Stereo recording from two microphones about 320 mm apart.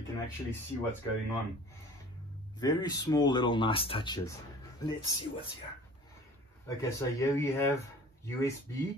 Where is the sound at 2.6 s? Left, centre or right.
Centre.